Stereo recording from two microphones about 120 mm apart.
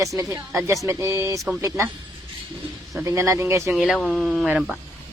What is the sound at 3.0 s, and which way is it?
Speech, 25° right (ahead or behind).